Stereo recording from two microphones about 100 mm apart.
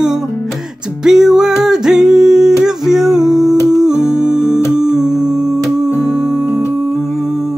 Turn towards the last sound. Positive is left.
turn(degrees=-5)  # may be behind; listen again after turning